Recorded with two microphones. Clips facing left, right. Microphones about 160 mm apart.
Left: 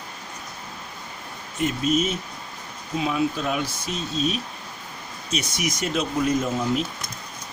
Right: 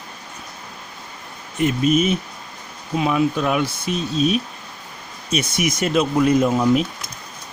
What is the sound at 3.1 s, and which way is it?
Speech, 65° right (ahead or behind).